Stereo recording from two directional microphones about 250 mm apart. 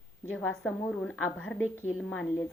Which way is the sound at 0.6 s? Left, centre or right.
Centre.